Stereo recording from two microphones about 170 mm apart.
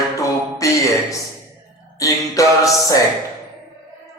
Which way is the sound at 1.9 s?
20° left (ahead or behind).